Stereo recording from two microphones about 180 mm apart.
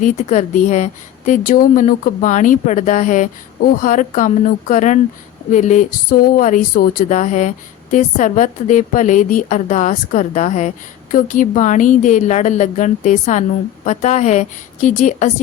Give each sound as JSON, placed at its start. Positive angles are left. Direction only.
{"t": 0.0, "sound": "a woman's voice", "side_deg": 40}